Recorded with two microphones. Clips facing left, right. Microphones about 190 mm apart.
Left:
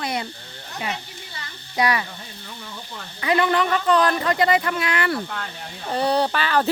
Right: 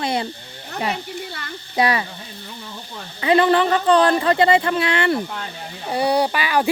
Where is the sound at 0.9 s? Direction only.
60° right (ahead or behind).